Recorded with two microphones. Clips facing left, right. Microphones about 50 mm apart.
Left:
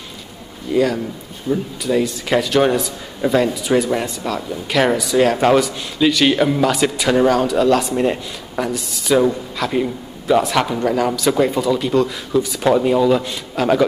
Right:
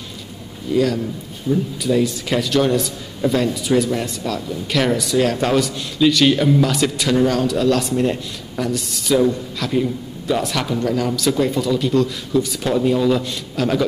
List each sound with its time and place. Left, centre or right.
0.7 s a man's voice: centre
12.6 s a man's voice: left